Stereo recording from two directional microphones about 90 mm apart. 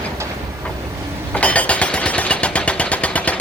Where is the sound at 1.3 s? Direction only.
15° left (ahead or behind).